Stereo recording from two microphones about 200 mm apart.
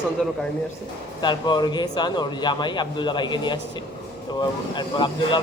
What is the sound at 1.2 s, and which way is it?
A man's voice, 20° left (ahead or behind).